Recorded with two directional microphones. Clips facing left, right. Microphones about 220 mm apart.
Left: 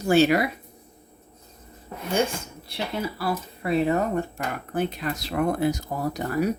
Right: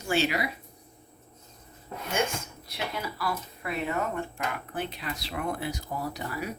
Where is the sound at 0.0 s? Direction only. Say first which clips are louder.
Left 9 dB; 45° left (ahead or behind).